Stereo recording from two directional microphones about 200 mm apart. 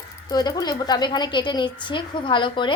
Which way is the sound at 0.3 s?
20° left (ahead or behind).